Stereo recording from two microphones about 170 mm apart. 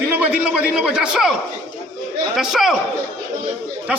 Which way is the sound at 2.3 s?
Centre (ahead or behind).